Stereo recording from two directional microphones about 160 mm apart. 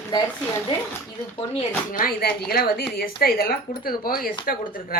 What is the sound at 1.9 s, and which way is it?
Speech, 65° left (ahead or behind).